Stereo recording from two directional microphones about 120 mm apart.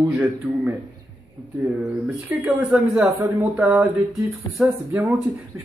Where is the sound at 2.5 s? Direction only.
15° right (ahead or behind).